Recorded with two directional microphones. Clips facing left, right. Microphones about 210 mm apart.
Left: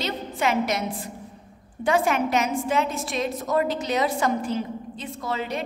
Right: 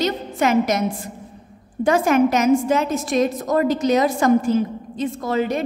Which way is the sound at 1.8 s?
45° right (ahead or behind).